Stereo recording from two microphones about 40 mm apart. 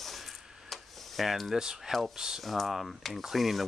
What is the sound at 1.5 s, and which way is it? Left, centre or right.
Speech, centre.